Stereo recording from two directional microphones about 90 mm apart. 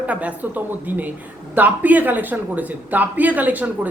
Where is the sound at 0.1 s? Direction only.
15° right (ahead or behind).